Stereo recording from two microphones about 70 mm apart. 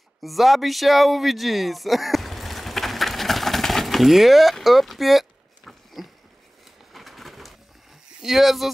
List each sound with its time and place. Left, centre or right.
0.2 s speech: centre
6.0 s a sound: centre
6.9 s bird: centre
8.2 s speech: centre